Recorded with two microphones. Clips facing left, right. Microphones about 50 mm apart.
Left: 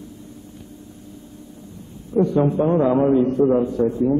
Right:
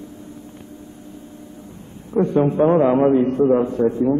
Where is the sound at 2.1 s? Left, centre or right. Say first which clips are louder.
Right 1 dB; right.